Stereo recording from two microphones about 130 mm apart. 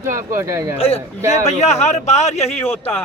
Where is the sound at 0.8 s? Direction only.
50° left (ahead or behind).